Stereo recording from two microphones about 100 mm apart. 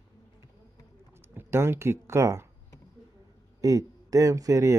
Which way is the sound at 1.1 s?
20° right (ahead or behind).